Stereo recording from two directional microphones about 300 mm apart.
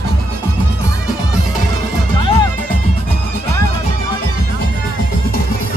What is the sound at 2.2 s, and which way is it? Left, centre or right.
Music, centre.